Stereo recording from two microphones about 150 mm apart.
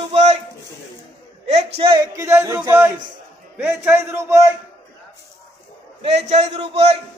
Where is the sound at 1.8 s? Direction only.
35° right (ahead or behind).